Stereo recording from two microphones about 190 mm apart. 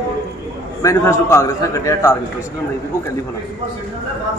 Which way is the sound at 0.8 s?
15° left (ahead or behind).